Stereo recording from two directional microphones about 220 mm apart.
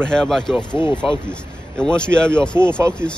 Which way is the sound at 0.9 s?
5° left (ahead or behind).